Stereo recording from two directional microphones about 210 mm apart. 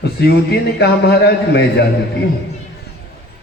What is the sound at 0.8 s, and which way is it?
A man's voice, 50° left (ahead or behind).